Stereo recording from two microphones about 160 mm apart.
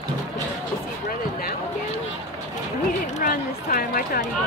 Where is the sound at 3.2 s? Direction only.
55° left (ahead or behind).